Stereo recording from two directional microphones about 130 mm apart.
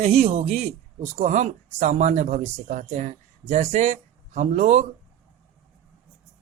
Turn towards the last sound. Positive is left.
turn(degrees=-65)  # may be behind; listen again after turning